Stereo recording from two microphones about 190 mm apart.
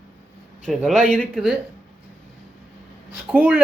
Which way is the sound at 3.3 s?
10° right (ahead or behind).